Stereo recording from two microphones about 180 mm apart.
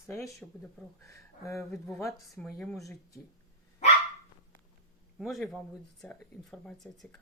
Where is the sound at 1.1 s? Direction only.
15° left (ahead or behind).